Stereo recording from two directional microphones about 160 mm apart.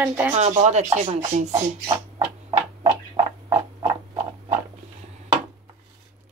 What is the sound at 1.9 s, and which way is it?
Rodents, 30° right (ahead or behind).